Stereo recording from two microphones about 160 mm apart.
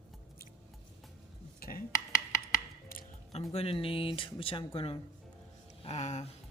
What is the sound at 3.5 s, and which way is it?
Speech, 35° left (ahead or behind).